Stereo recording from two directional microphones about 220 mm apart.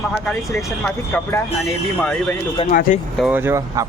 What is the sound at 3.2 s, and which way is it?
Speech, 10° right (ahead or behind).